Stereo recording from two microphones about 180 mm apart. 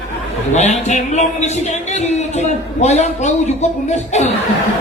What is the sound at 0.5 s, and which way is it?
A woman's voice, 40° left (ahead or behind).